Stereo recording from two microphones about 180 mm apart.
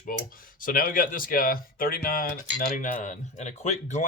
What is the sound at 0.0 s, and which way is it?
Speech, 50° left (ahead or behind).